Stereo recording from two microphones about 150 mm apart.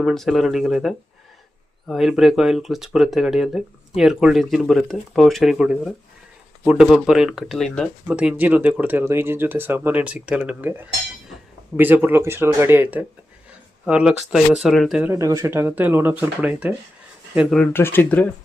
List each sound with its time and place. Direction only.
0.0 s speech: centre (ahead or behind)
15.1 s speech: 20° right (ahead or behind)
17.6 s speech: 15° left (ahead or behind)